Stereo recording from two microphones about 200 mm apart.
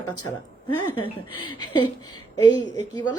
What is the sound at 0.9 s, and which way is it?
A woman's voice, 25° left (ahead or behind).